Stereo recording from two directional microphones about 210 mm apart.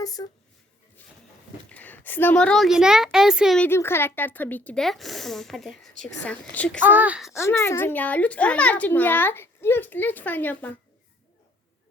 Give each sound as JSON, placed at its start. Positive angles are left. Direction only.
{"t": 0.0, "sound": "speech", "side_deg": 15}
{"t": 1.0, "sound": "a sound", "side_deg": 10}
{"t": 1.7, "sound": "a child's voice", "side_deg": 5}
{"t": 6.8, "sound": "a child's voice", "side_deg": -10}
{"t": 7.3, "sound": "a child's voice", "side_deg": 15}